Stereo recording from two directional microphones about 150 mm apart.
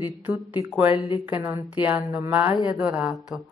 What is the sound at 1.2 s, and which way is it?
A woman's voice, 10° right (ahead or behind).